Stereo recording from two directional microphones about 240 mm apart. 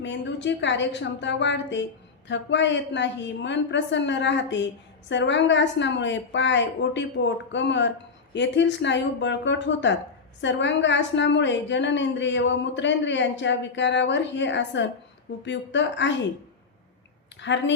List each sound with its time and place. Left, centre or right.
0.0 s a woman's voice: left
17.4 s a woman's voice: left